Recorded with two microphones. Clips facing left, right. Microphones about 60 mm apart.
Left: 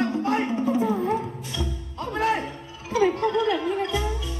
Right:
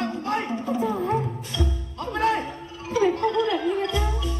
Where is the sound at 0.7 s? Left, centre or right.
Right.